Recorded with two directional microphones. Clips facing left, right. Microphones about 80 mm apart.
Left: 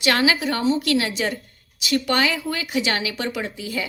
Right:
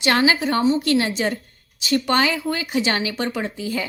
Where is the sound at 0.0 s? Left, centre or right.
Right.